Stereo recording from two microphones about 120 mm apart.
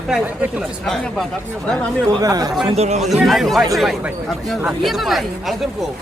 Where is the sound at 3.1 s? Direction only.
Centre (ahead or behind).